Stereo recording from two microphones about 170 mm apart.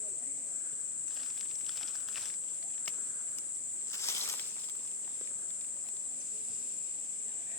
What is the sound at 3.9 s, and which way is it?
Snake, 15° left (ahead or behind).